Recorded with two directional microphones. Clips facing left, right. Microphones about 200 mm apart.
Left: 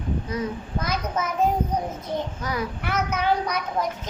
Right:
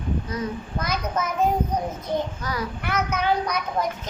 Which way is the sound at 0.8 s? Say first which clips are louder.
Even; 5° left (ahead or behind).